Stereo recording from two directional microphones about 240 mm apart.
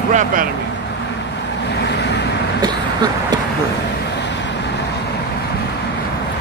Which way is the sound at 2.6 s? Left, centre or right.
Centre.